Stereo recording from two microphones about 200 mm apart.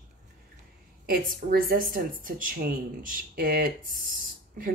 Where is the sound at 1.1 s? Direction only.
45° right (ahead or behind).